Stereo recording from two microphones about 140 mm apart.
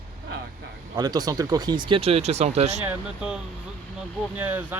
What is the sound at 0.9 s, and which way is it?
Speech, 30° right (ahead or behind).